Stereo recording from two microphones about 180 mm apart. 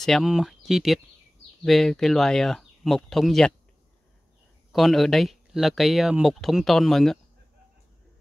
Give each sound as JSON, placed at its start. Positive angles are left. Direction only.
{"t": 0.0, "sound": "speech", "side_deg": 0}
{"t": 4.7, "sound": "speech", "side_deg": 0}